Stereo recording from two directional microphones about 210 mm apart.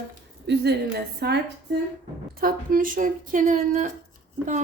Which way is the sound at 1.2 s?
50° right (ahead or behind).